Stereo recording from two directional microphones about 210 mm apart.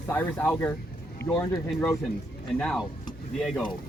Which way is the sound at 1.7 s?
Centre (ahead or behind).